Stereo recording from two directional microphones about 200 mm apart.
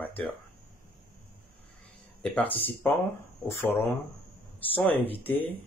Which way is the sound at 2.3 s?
10° left (ahead or behind).